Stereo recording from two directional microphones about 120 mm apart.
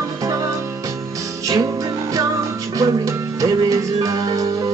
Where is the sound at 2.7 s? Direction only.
30° right (ahead or behind).